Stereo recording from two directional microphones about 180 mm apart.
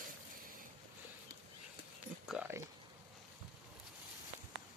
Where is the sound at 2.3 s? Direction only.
10° right (ahead or behind).